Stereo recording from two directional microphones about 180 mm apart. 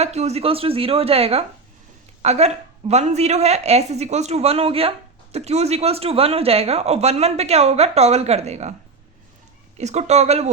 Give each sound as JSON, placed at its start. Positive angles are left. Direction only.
{"t": 0.0, "sound": "speech", "side_deg": -35}
{"t": 9.7, "sound": "speech", "side_deg": -40}